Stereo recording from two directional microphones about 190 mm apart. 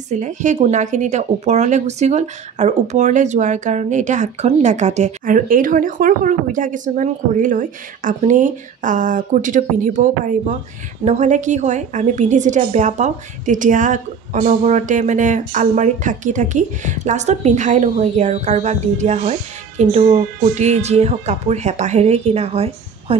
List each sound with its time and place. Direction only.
0.1 s speech: 40° right (ahead or behind)